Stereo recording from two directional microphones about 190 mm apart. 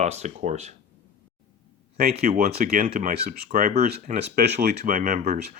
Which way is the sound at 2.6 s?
55° right (ahead or behind).